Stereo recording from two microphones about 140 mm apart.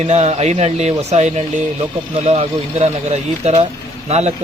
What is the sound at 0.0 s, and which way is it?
Speech, 55° right (ahead or behind).